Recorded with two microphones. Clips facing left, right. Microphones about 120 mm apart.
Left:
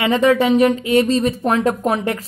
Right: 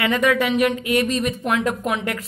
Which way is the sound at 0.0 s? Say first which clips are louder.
Left 4 dB; 30° left (ahead or behind).